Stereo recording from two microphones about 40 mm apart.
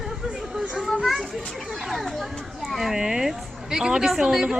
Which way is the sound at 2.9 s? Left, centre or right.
Centre.